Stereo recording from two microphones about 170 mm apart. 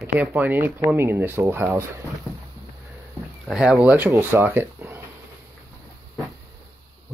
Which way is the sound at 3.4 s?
Centre (ahead or behind).